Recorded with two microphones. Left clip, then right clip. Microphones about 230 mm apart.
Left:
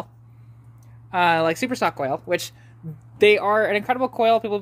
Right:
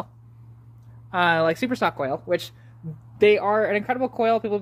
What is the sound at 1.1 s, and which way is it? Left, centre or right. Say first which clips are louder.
Speech: left 1 dB; centre.